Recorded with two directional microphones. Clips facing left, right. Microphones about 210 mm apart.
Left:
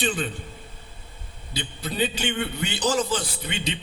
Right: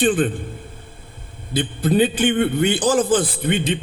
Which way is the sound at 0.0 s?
50° right (ahead or behind).